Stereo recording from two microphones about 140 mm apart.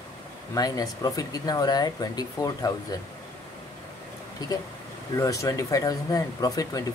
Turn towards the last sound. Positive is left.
turn(degrees=25)  # may be behind; listen again after turning